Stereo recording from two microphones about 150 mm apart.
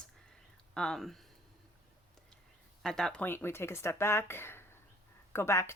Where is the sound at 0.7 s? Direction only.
5° left (ahead or behind).